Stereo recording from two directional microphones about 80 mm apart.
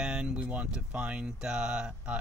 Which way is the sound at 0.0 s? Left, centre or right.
Centre.